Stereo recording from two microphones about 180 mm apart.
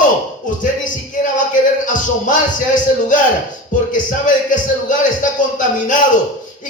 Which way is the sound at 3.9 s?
45° left (ahead or behind).